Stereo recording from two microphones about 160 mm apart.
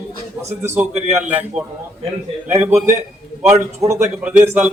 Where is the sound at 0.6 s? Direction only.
10° right (ahead or behind).